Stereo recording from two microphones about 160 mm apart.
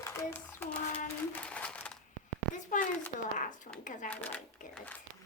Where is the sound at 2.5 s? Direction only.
50° left (ahead or behind).